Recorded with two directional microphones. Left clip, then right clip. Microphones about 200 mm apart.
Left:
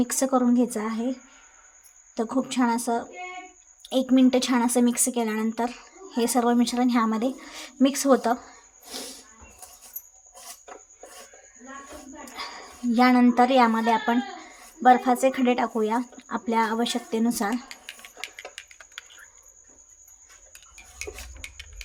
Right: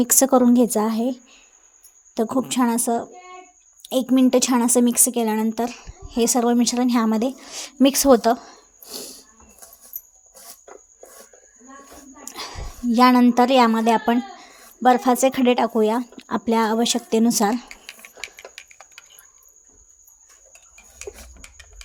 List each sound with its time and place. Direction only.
0.0 s a woman's voice: 50° right (ahead or behind)
12.2 s a woman's voice: 50° right (ahead or behind)
18.3 s typing: 65° left (ahead or behind)